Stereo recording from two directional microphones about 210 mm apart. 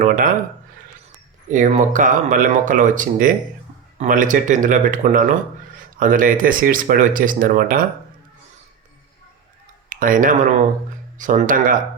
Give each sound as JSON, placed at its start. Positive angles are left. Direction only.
{"t": 0.0, "sound": "speech", "side_deg": -40}
{"t": 1.5, "sound": "speech", "side_deg": -35}
{"t": 9.9, "sound": "speech", "side_deg": -40}